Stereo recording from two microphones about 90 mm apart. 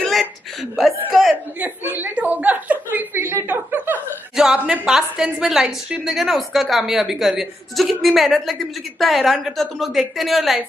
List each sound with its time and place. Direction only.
0.0 s chuckle: centre (ahead or behind)
1.6 s chuckle: 20° right (ahead or behind)
4.4 s a sound: 5° right (ahead or behind)
4.8 s a woman's voice: 5° right (ahead or behind)